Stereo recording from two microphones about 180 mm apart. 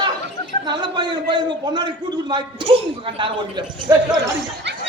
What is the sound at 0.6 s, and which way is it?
A man's voice, 25° right (ahead or behind).